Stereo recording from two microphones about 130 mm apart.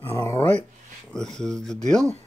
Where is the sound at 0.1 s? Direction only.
25° left (ahead or behind).